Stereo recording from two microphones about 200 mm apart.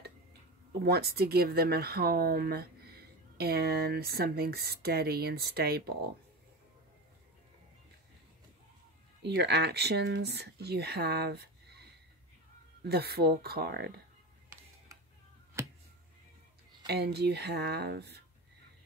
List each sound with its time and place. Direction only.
0.8 s speech: 50° right (ahead or behind)
9.2 s speech: 60° right (ahead or behind)
15.6 s a sound: 15° right (ahead or behind)
16.8 s speech: 55° right (ahead or behind)